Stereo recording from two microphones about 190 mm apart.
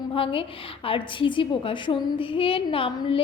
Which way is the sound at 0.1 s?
25° left (ahead or behind).